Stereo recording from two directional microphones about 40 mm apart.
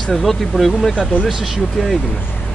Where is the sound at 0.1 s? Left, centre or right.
Centre.